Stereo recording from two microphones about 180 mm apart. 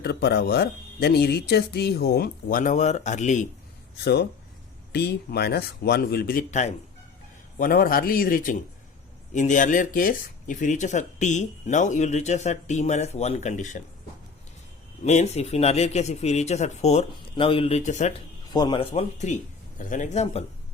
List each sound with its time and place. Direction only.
0.0 s speech: 65° left (ahead or behind); by 3.4 s 40° left (ahead or behind)
4.0 s speech: 65° left (ahead or behind); by 6.7 s 40° left (ahead or behind)
7.6 s a man's voice: 55° left (ahead or behind)
15.0 s speech: 40° left (ahead or behind)
18.5 s speech: 25° left (ahead or behind)